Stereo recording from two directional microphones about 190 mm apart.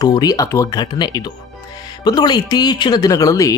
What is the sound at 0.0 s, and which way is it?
Speech, 20° left (ahead or behind).